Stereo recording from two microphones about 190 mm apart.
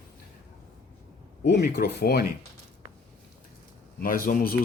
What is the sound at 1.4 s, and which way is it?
Speech, 60° left (ahead or behind).